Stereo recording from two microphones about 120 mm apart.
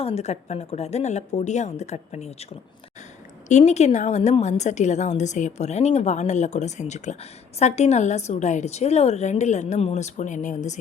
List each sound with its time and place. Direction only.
0.0 s a woman's voice: 65° left (ahead or behind); by 10.8 s 85° left